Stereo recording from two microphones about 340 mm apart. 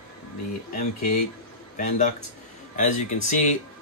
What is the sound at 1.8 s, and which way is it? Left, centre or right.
Speech, left.